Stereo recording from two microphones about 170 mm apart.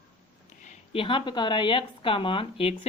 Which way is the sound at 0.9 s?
30° left (ahead or behind).